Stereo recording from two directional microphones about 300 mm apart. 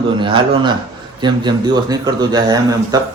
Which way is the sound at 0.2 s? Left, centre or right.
Centre.